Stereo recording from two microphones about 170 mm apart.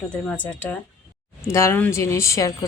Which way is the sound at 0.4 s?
10° left (ahead or behind).